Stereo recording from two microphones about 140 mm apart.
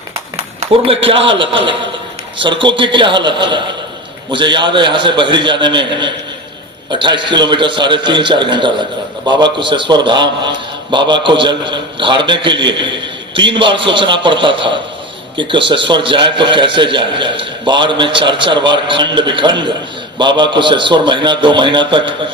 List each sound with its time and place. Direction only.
0.3 s a man's voice: 45° right (ahead or behind)